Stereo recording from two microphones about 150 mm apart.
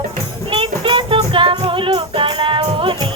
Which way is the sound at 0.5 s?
35° right (ahead or behind).